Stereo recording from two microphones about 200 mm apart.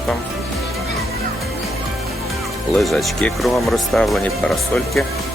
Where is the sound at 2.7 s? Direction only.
Centre (ahead or behind).